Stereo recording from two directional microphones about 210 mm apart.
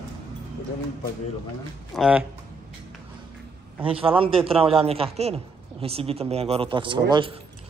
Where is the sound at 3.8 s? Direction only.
25° right (ahead or behind).